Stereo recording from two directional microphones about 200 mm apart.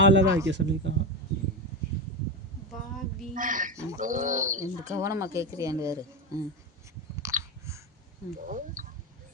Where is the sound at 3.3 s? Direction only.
40° right (ahead or behind).